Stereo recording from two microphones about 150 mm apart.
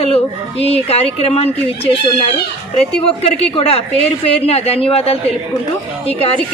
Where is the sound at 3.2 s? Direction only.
40° left (ahead or behind).